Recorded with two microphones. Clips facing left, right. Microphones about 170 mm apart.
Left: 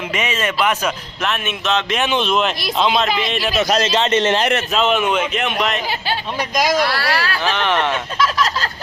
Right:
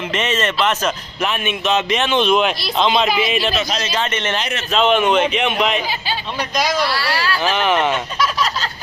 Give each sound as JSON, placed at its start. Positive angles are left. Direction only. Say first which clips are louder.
{"t": 0.1, "sound": "speech", "louder": "right 2 dB", "side_deg": 10}
{"t": 0.9, "sound": "speech", "louder": "right 1 dB", "side_deg": 0}
{"t": 3.1, "sound": "a man's voice", "louder": "right 2 dB", "side_deg": -10}
{"t": 3.6, "sound": "speech", "louder": "left 6 dB", "side_deg": 50}
{"t": 3.9, "sound": "speech", "louder": "left 4 dB", "side_deg": 30}
{"t": 4.7, "sound": "speech", "louder": "right 7 dB", "side_deg": 5}
{"t": 6.7, "sound": "speech", "louder": "left 2 dB", "side_deg": 50}
{"t": 7.4, "sound": "speech", "louder": "right 3 dB", "side_deg": -5}